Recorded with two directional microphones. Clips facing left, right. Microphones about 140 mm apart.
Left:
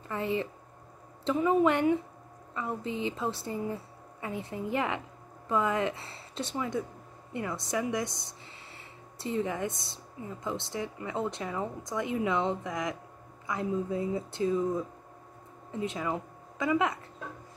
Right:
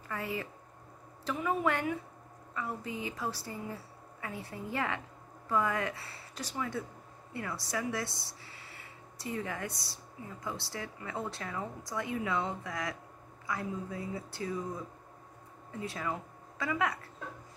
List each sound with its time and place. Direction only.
0.1 s speech: 25° left (ahead or behind)
15.7 s a woman's voice: 20° left (ahead or behind)